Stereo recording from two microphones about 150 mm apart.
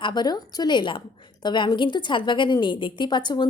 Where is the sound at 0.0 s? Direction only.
30° left (ahead or behind).